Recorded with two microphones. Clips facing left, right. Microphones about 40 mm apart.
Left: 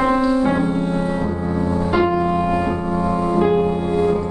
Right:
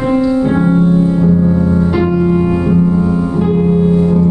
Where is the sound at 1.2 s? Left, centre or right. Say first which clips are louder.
Right 9 dB; centre.